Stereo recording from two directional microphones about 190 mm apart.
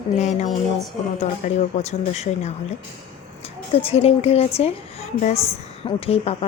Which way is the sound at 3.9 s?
30° left (ahead or behind).